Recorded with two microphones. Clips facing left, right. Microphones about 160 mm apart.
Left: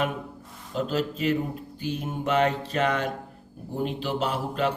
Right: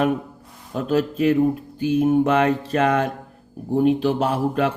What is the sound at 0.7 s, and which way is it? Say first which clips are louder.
A man's voice: right 6 dB; 55° right (ahead or behind).